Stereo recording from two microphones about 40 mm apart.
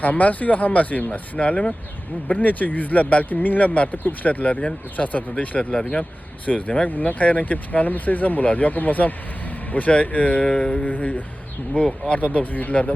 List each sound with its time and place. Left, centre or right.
0.0 s speech: left
2.2 s speech: left
5.5 s speech: left
6.0 s speech: left
10.4 s speech: left
10.8 s speech: left